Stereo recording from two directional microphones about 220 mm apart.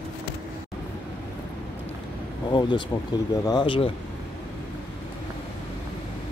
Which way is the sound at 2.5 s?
20° left (ahead or behind).